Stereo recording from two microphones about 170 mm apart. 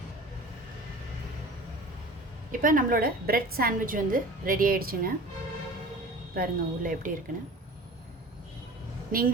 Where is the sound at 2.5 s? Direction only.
55° right (ahead or behind).